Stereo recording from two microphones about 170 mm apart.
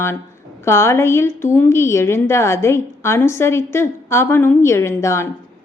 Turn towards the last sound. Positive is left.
turn(degrees=15)  # may be behind; listen again after turning